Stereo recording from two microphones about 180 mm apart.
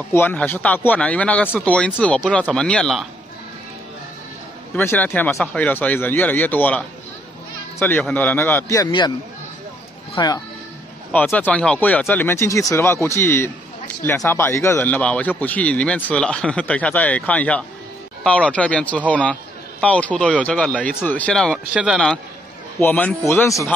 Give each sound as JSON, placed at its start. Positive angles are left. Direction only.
{"t": 0.1, "sound": "speech", "side_deg": 10}
{"t": 4.7, "sound": "speech", "side_deg": 10}
{"t": 10.1, "sound": "speech", "side_deg": 20}
{"t": 11.1, "sound": "speech", "side_deg": 5}